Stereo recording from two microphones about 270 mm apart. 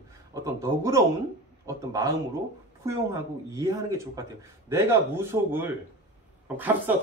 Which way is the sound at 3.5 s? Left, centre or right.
Centre.